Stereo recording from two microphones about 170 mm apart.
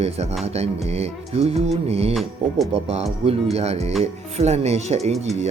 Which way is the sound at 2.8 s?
40° right (ahead or behind).